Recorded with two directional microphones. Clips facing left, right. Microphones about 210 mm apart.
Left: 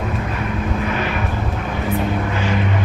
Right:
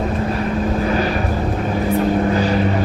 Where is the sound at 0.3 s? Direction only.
35° right (ahead or behind).